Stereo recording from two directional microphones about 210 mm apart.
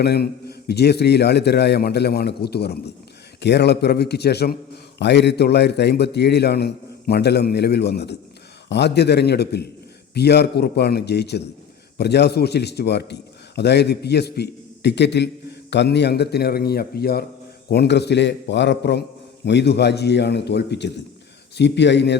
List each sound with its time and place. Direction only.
0.0 s a man's voice: 50° left (ahead or behind)